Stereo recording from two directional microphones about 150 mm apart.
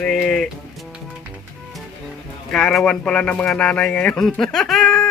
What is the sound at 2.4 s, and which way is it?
Speech, 5° left (ahead or behind).